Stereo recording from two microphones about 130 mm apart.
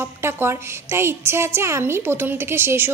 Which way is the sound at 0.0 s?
20° right (ahead or behind).